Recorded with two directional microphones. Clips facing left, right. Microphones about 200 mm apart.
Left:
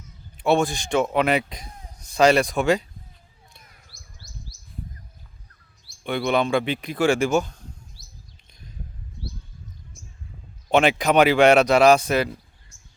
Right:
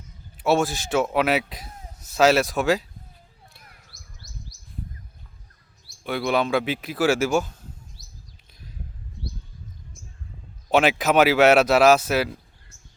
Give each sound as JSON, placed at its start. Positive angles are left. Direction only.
{"t": 0.4, "sound": "a man's voice", "side_deg": -5}
{"t": 3.9, "sound": "chirp", "side_deg": -20}
{"t": 6.0, "sound": "a man's voice", "side_deg": 0}
{"t": 8.0, "sound": "chirp", "side_deg": -20}
{"t": 10.7, "sound": "a man's voice", "side_deg": -5}